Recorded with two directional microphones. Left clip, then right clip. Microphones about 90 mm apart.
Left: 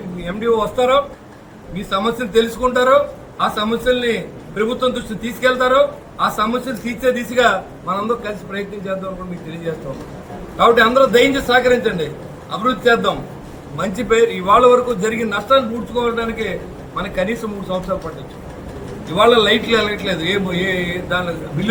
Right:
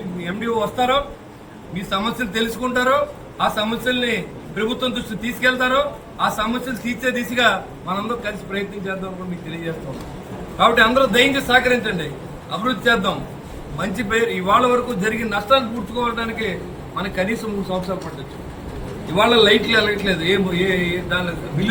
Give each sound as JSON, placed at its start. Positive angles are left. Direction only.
{"t": 0.3, "sound": "a man's voice", "side_deg": 10}
{"t": 10.6, "sound": "a man's voice", "side_deg": 20}
{"t": 19.1, "sound": "a man's voice", "side_deg": 0}